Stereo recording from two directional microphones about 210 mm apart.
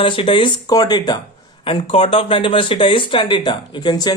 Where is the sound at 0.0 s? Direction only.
25° left (ahead or behind).